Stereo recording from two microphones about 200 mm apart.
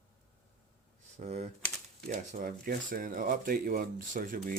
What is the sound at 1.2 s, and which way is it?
Speech, 35° right (ahead or behind).